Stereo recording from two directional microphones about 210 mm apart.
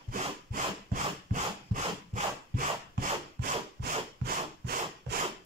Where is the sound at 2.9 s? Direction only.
45° right (ahead or behind).